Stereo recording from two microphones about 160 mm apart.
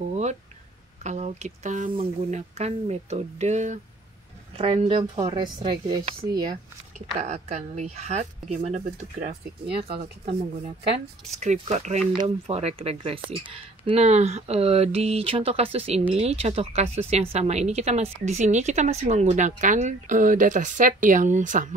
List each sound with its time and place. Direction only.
1.0 s a woman's voice: 45° right (ahead or behind)
4.6 s speech: 35° right (ahead or behind)
7.2 s a woman's voice: 45° right (ahead or behind)
9.7 s speech: 75° right (ahead or behind)
9.9 s a woman's voice: 40° right (ahead or behind)